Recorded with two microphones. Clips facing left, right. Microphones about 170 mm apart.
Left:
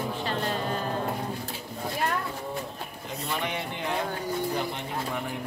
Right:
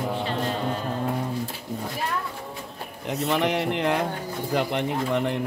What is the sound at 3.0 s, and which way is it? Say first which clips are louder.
Speech: right 9 dB; 70° right (ahead or behind).